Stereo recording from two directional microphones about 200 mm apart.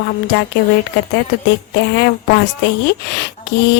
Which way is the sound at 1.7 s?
60° left (ahead or behind).